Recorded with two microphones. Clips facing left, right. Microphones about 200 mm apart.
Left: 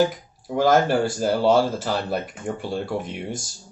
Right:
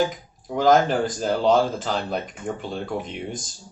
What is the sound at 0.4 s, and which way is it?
Speech, 5° left (ahead or behind).